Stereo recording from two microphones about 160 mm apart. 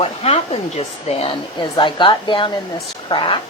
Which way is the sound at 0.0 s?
40° left (ahead or behind).